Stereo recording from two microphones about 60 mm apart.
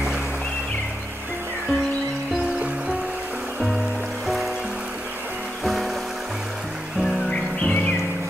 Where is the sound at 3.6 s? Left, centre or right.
Centre.